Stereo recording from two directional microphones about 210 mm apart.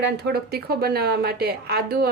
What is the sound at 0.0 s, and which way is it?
Speech, 50° right (ahead or behind).